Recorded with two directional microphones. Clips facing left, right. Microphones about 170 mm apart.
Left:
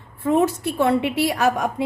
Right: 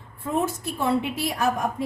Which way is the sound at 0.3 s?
75° left (ahead or behind).